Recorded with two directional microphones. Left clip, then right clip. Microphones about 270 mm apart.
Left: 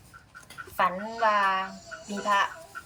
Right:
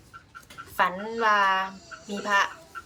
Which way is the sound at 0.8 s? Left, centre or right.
Centre.